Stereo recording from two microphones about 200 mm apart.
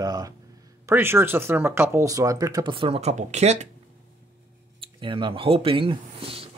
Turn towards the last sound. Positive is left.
turn(degrees=-30)  # may be behind; listen again after turning